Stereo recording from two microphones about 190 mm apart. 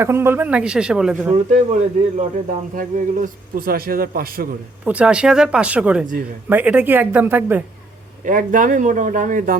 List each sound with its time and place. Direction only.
0.0 s a man's voice: 15° right (ahead or behind)
1.5 s speech: 40° right (ahead or behind)
4.9 s a man's voice: 5° right (ahead or behind)
8.2 s speech: 45° right (ahead or behind)